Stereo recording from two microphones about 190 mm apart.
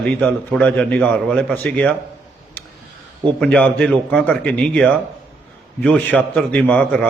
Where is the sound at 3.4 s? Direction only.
5° left (ahead or behind).